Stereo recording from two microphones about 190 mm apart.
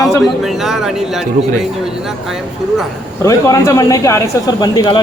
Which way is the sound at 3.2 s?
15° left (ahead or behind).